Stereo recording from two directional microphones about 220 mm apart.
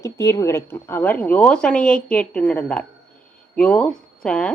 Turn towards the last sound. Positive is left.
turn(degrees=5)  # may be behind; listen again after turning